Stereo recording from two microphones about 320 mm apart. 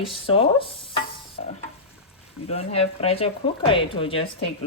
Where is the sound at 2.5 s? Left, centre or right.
Centre.